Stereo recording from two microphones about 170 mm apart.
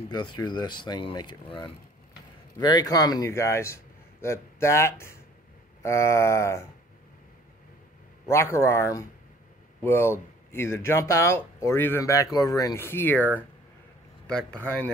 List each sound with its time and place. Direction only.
0.1 s a man's voice: 25° left (ahead or behind)
8.3 s a man's voice: 15° left (ahead or behind)